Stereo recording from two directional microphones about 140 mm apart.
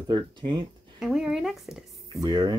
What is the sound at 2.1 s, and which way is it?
Speech, 30° right (ahead or behind).